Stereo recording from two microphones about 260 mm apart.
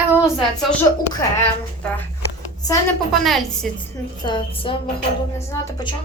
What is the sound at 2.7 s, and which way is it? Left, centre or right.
Speech, centre.